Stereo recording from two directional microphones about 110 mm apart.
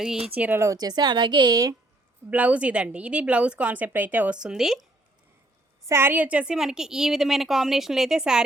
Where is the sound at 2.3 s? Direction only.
15° right (ahead or behind).